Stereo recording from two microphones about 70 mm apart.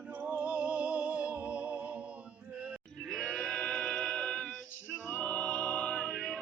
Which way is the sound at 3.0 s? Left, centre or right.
Centre.